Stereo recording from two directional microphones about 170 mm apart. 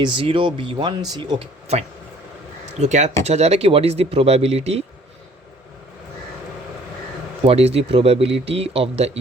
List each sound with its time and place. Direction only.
0.0 s speech: 30° right (ahead or behind)
7.4 s speech: 35° right (ahead or behind)